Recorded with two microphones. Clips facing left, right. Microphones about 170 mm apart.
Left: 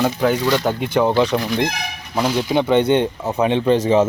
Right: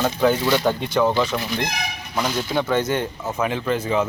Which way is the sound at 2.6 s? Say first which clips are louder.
Left 6 dB; 20° left (ahead or behind).